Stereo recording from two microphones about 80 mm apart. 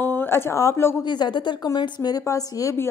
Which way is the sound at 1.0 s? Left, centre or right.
Left.